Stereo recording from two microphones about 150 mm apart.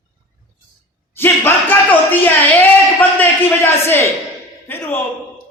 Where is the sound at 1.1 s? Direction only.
15° left (ahead or behind).